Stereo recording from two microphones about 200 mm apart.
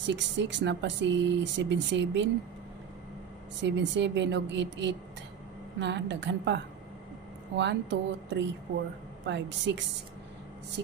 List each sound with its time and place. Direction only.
0.0 s speech: 60° right (ahead or behind)
3.6 s speech: 65° right (ahead or behind)